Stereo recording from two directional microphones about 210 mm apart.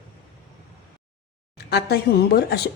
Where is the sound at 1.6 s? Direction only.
50° left (ahead or behind).